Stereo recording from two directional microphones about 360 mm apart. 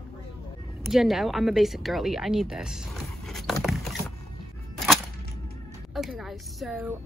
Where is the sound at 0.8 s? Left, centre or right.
Centre.